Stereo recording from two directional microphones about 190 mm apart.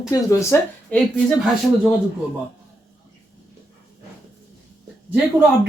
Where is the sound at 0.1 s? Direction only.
15° left (ahead or behind).